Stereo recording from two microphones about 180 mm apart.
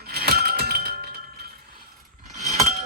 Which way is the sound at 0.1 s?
60° right (ahead or behind).